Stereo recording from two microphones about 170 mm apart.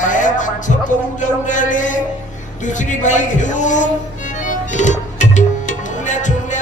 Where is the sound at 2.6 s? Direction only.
45° left (ahead or behind).